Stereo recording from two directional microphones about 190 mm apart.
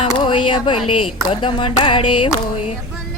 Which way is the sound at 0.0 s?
25° left (ahead or behind).